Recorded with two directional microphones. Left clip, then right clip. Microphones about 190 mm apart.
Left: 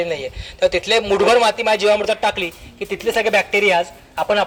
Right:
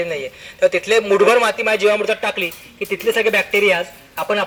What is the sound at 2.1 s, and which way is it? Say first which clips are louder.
A man's voice: left 1 dB; 65° left (ahead or behind).